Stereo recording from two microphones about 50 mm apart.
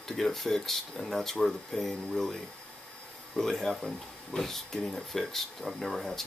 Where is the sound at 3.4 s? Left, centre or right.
Centre.